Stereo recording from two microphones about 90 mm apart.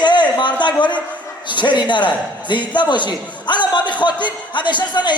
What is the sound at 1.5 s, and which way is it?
A man's voice, 60° left (ahead or behind).